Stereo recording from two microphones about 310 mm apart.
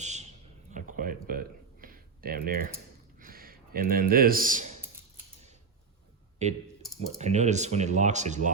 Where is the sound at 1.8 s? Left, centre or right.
Right.